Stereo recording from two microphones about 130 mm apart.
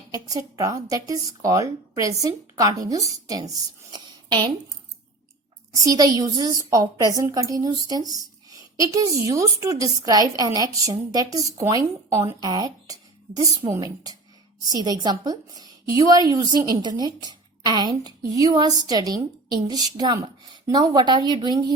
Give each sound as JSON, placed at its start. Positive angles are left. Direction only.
{"t": 0.1, "sound": "speech", "side_deg": -30}
{"t": 3.9, "sound": "a sound", "side_deg": -35}
{"t": 5.7, "sound": "a woman's voice", "side_deg": -30}